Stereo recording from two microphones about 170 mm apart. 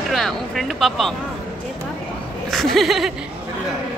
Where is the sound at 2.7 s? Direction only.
Centre (ahead or behind).